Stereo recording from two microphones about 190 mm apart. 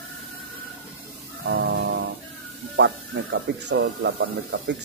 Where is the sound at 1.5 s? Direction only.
60° right (ahead or behind).